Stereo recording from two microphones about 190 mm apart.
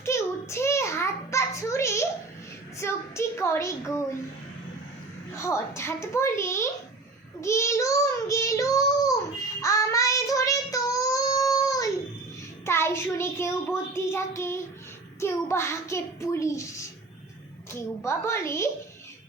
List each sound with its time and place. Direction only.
0.0 s a sound: 15° left (ahead or behind)
5.4 s a child's voice: 15° left (ahead or behind)
9.6 s child singing: 15° left (ahead or behind)
15.2 s a child's voice: 15° left (ahead or behind)